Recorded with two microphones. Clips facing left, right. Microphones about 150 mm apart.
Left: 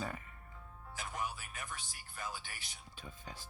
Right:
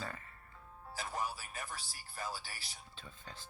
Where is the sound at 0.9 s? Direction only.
35° right (ahead or behind).